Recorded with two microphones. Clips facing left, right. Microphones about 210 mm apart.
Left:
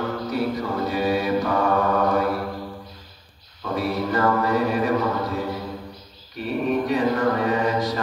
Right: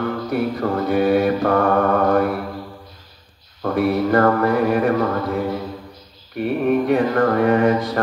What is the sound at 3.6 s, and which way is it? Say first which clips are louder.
Mantra: right 6 dB; 55° right (ahead or behind).